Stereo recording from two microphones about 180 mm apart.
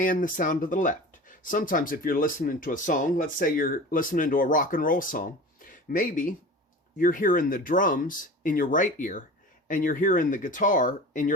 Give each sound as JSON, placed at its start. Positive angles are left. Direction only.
{"t": 0.0, "sound": "speech", "side_deg": 50}